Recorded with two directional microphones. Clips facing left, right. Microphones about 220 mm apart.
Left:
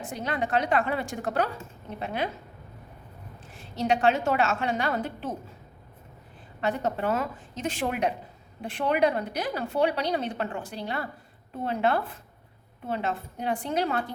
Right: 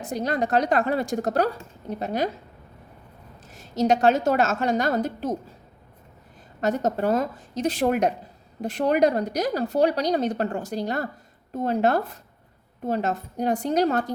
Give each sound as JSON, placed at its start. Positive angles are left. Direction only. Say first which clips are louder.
{"t": 0.0, "sound": "a woman's voice", "louder": "right 5 dB", "side_deg": -40}
{"t": 3.5, "sound": "a woman's voice", "louder": "right 5 dB", "side_deg": -40}
{"t": 6.6, "sound": "a woman's voice", "louder": "right 4 dB", "side_deg": -40}